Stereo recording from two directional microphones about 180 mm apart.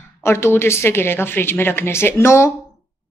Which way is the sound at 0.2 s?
15° left (ahead or behind).